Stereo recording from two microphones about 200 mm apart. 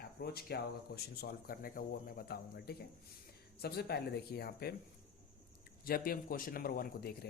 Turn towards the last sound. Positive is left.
turn(degrees=50)  # may be behind; listen again after turning